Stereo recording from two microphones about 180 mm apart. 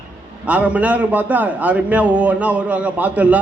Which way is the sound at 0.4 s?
5° right (ahead or behind).